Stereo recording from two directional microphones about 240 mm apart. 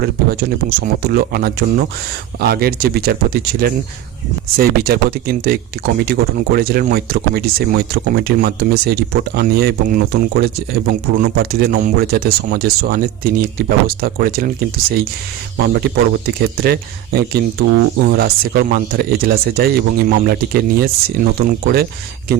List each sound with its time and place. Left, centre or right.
0.0 s speech: right